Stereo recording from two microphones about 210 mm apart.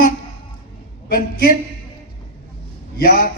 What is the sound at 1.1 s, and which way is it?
Speech, 45° left (ahead or behind).